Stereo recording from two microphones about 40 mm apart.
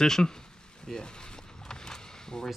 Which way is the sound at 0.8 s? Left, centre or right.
Centre.